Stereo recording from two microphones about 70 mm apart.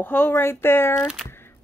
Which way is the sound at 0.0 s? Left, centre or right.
Left.